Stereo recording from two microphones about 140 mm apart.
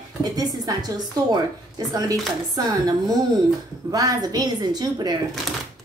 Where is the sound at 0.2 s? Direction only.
25° right (ahead or behind).